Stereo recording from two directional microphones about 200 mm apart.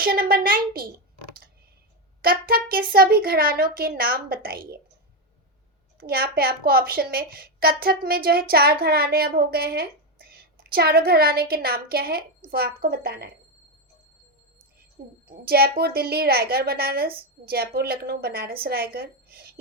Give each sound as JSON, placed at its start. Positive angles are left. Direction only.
{"t": 0.0, "sound": "a woman's voice", "side_deg": -50}
{"t": 2.2, "sound": "a woman's voice", "side_deg": -50}
{"t": 6.0, "sound": "a woman's voice", "side_deg": -50}
{"t": 15.3, "sound": "a woman's voice", "side_deg": -50}